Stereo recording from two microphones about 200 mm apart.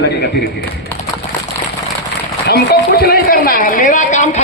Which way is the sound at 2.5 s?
50° left (ahead or behind).